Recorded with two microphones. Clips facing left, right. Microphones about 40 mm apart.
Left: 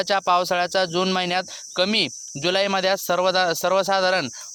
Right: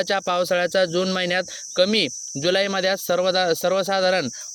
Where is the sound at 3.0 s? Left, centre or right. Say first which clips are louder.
Even; centre.